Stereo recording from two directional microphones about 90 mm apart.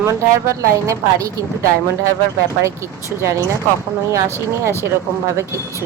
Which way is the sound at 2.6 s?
35° right (ahead or behind).